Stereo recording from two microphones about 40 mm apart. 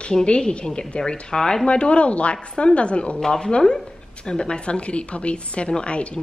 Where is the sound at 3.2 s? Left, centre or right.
Centre.